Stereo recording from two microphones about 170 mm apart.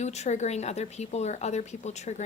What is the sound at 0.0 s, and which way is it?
Speech, 40° left (ahead or behind).